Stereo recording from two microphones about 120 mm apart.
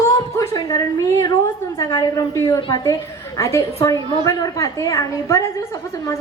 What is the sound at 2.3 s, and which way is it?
A woman's voice, 25° left (ahead or behind).